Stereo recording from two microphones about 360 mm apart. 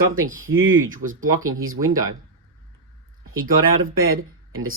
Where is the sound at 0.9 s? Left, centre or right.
Right.